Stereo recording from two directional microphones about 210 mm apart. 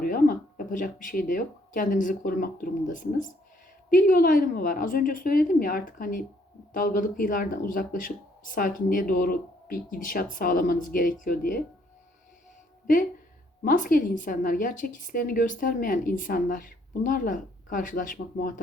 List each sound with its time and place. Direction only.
0.0 s a woman's voice: 45° left (ahead or behind)
13.7 s a woman's voice: 40° left (ahead or behind)